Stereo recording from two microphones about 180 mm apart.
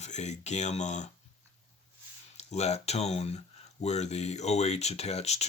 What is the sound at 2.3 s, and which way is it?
Speech, 35° left (ahead or behind).